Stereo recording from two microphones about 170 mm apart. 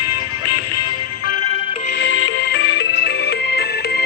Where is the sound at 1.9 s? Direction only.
85° left.